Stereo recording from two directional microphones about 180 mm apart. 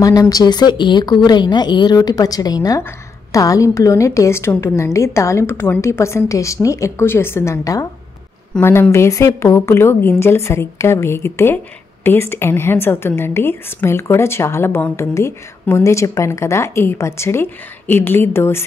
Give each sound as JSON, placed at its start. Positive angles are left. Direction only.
{"t": 0.0, "sound": "speech", "side_deg": 20}